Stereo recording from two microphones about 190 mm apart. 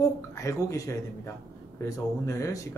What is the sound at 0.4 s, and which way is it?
A woman's voice, 15° left (ahead or behind).